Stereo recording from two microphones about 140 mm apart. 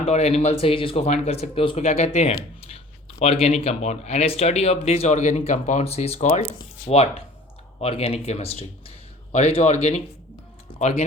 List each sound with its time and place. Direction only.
0.0 s speech: 50° left (ahead or behind)
10.7 s music: 55° left (ahead or behind)